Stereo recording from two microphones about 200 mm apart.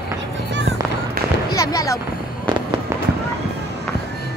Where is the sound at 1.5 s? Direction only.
15° left (ahead or behind).